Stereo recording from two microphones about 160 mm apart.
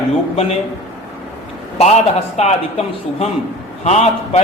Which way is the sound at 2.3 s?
45° left (ahead or behind).